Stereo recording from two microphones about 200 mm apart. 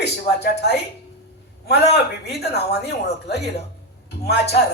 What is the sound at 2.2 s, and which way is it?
A man's voice, 55° left (ahead or behind).